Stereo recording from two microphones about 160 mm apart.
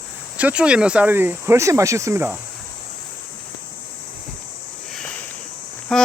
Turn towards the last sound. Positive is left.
turn(degrees=5)  # may be behind; listen again after turning